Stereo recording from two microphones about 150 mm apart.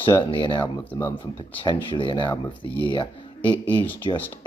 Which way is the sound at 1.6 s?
35° left (ahead or behind).